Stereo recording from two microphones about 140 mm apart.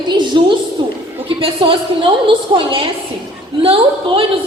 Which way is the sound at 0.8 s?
35° right (ahead or behind).